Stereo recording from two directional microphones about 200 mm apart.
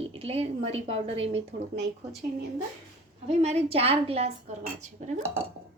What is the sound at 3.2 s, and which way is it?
A woman's voice, 35° right (ahead or behind).